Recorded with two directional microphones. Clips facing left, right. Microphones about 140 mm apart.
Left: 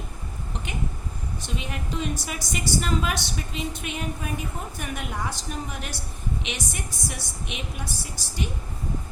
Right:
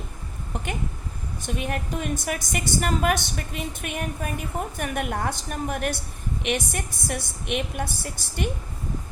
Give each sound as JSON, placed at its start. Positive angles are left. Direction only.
{"t": 1.4, "sound": "a woman's voice", "side_deg": -50}